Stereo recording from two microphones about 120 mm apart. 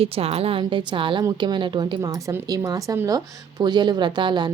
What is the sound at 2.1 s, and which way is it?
Speech, 25° right (ahead or behind).